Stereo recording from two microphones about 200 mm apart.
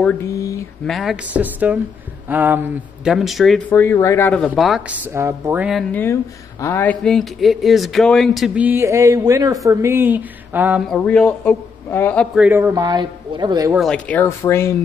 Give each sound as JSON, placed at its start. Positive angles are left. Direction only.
{"t": 0.0, "sound": "speech", "side_deg": 10}
{"t": 0.8, "sound": "a man's voice", "side_deg": 0}
{"t": 4.5, "sound": "a man's voice", "side_deg": 0}
{"t": 10.9, "sound": "speech", "side_deg": 5}
{"t": 12.4, "sound": "speech", "side_deg": -10}
{"t": 13.7, "sound": "speech", "side_deg": 5}